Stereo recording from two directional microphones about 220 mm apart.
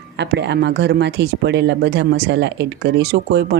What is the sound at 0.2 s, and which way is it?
Speech, 50° right (ahead or behind).